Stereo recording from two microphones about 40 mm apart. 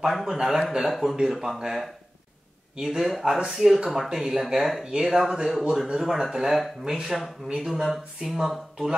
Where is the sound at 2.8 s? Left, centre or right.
Centre.